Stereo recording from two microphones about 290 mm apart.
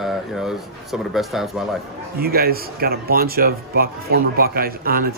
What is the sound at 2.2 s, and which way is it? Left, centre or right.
Speech, right.